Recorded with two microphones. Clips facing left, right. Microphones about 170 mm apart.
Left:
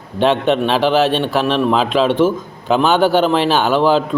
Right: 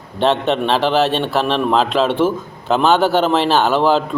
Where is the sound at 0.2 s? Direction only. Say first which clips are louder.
Left 2 dB; centre (ahead or behind).